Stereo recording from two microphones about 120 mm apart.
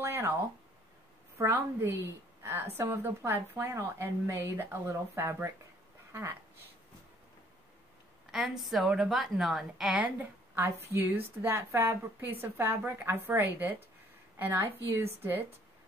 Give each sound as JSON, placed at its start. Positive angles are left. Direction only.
{"t": 0.0, "sound": "a sound", "side_deg": -20}
{"t": 1.4, "sound": "a woman's voice", "side_deg": -20}
{"t": 8.3, "sound": "a woman's voice", "side_deg": 0}
{"t": 10.5, "sound": "a woman's voice", "side_deg": -20}